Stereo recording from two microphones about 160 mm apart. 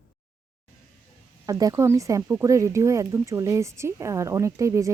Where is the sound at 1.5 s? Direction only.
20° right (ahead or behind).